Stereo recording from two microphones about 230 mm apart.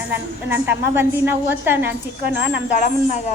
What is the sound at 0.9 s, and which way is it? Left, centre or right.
A woman's voice, centre.